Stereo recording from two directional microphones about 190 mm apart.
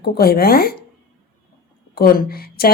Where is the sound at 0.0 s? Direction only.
55° left (ahead or behind).